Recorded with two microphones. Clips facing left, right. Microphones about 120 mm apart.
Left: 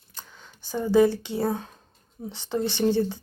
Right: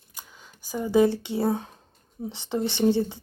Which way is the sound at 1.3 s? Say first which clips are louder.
Right 1 dB; 20° right (ahead or behind).